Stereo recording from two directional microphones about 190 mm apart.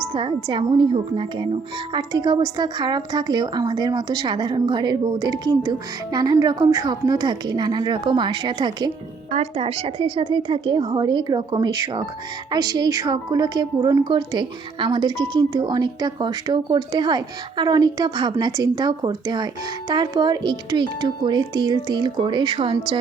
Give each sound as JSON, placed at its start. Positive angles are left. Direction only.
{"t": 0.1, "sound": "a woman's voice", "side_deg": -25}